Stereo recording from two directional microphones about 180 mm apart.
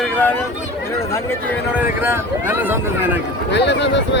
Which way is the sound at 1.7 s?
10° right (ahead or behind).